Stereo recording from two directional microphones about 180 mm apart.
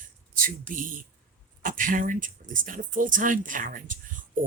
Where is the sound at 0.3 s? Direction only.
50° right (ahead or behind).